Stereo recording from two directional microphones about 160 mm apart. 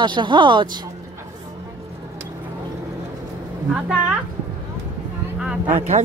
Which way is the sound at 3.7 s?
5° right (ahead or behind).